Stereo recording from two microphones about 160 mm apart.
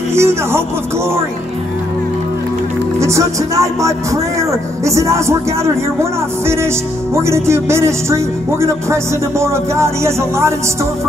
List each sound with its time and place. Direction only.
0.1 s music: 15° right (ahead or behind)
3.0 s speech: 20° right (ahead or behind)